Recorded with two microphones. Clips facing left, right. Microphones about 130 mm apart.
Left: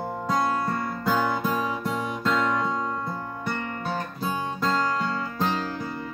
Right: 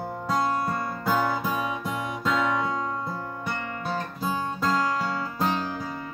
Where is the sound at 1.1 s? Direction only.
5° right (ahead or behind).